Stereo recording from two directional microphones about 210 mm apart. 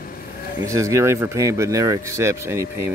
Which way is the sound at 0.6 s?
15° right (ahead or behind).